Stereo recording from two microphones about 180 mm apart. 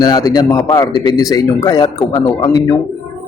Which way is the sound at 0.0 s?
20° left (ahead or behind).